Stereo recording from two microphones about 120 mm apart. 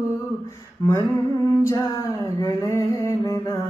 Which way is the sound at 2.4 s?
30° left (ahead or behind).